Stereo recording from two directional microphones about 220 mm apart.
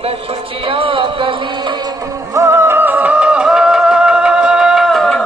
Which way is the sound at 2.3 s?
10° right (ahead or behind).